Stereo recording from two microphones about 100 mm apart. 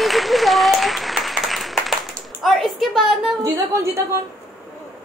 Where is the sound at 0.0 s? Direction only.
Centre (ahead or behind).